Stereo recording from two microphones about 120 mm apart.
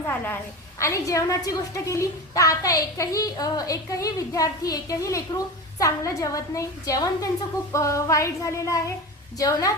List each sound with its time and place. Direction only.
0.8 s a woman's voice: 25° left (ahead or behind)